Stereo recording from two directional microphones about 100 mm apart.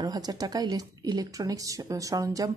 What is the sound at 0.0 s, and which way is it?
Speech, 40° right (ahead or behind).